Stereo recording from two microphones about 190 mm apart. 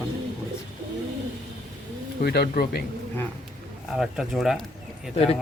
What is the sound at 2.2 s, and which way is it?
Speech, 60° left (ahead or behind).